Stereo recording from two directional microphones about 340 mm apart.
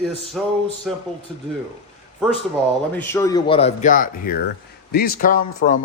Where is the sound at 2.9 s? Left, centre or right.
Centre; by 5.8 s left.